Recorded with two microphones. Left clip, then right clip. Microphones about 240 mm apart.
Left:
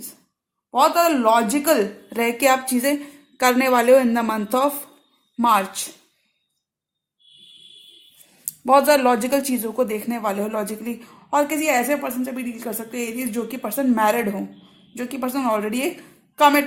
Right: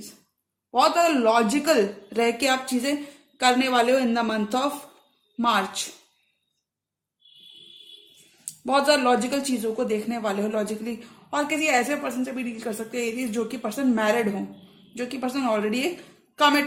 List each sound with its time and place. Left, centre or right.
0.7 s a woman's voice: left
8.6 s a woman's voice: left